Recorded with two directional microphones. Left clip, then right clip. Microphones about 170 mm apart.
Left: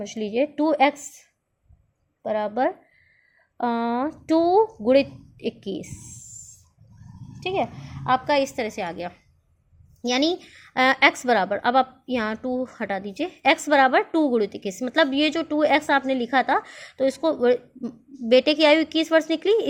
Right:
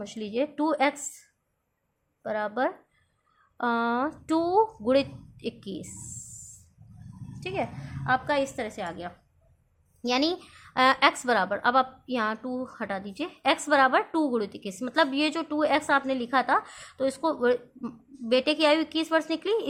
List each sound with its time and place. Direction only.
0.0 s a woman's voice: 10° left (ahead or behind)
2.2 s a woman's voice: 15° left (ahead or behind)
7.3 s a woman's voice: 15° left (ahead or behind); by 9.1 s 35° left (ahead or behind)
10.1 s a woman's voice: 20° left (ahead or behind)